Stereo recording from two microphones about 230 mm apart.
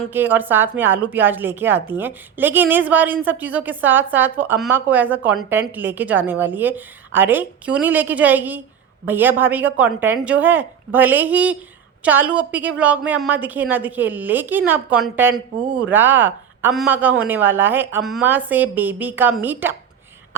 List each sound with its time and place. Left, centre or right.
0.1 s a woman's voice: centre